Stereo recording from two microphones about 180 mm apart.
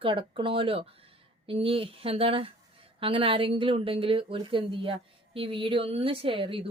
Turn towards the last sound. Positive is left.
turn(degrees=-30)  # may be behind; listen again after turning